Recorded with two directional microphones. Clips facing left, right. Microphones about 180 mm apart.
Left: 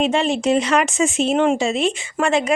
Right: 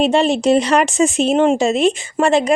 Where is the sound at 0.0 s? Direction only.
35° right (ahead or behind).